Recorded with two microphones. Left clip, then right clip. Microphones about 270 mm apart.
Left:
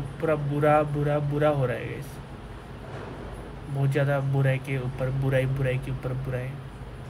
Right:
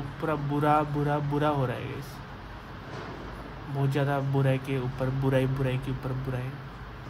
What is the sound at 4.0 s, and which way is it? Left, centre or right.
Speech, centre.